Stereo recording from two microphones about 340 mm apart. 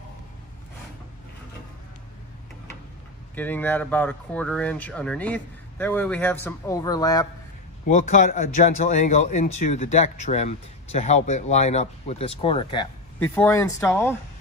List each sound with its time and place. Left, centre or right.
3.3 s speech: centre
7.9 s speech: left